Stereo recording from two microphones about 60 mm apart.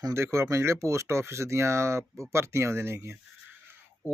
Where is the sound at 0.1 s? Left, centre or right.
Right.